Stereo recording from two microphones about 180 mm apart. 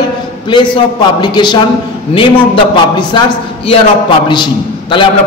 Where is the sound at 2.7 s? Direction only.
25° left (ahead or behind).